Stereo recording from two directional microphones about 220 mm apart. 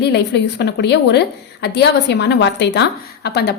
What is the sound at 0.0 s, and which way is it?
A woman's voice, 50° left (ahead or behind).